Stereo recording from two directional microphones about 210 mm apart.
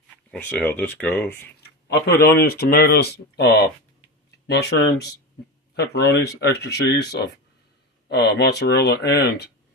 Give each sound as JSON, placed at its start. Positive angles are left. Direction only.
{"t": 0.3, "sound": "speech", "side_deg": 5}
{"t": 1.6, "sound": "speech", "side_deg": 50}